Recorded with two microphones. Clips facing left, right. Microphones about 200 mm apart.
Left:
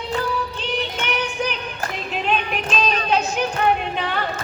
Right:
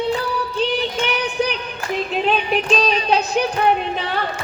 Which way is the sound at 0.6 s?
35° right (ahead or behind).